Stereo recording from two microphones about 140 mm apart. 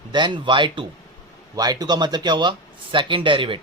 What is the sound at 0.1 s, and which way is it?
A man's voice, 35° right (ahead or behind).